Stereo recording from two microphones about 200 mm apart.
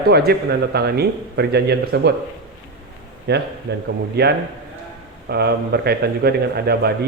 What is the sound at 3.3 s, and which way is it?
A man's voice, 55° right (ahead or behind).